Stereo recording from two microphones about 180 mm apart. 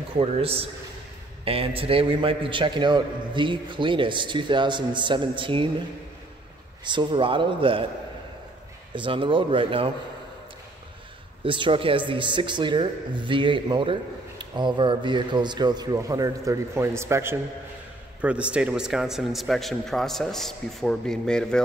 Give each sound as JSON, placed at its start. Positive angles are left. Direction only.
{"t": 0.2, "sound": "a man's voice", "side_deg": -30}
{"t": 6.8, "sound": "a man's voice", "side_deg": -25}
{"t": 8.9, "sound": "a man's voice", "side_deg": -25}
{"t": 11.4, "sound": "a man's voice", "side_deg": -30}